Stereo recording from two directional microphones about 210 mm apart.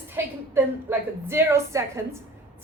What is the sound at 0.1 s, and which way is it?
A woman's voice, 10° right (ahead or behind).